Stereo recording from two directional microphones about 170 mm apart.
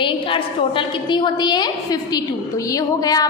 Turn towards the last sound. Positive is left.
turn(degrees=20)  # may be behind; listen again after turning